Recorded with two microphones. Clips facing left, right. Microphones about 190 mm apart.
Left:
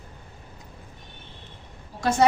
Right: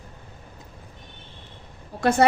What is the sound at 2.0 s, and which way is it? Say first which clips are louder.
Speech: right 4 dB; 60° right (ahead or behind).